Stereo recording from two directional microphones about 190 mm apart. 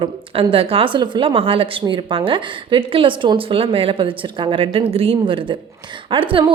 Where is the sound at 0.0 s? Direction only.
30° right (ahead or behind).